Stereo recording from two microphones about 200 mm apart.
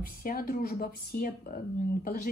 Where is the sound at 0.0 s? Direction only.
45° left (ahead or behind).